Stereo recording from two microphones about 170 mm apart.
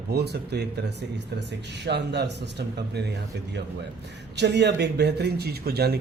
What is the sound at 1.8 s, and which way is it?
A man's voice, 85° right.